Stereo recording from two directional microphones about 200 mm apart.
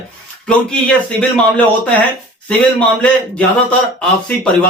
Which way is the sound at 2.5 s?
5° left (ahead or behind).